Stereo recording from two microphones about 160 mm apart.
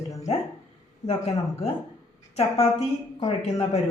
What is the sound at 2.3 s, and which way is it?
Speech, 40° left (ahead or behind).